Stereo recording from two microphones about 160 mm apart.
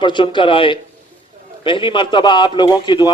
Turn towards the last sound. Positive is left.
turn(degrees=30)  # may be behind; listen again after turning